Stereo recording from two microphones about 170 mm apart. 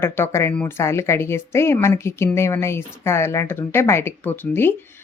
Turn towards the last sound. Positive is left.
turn(degrees=15)  # may be behind; listen again after turning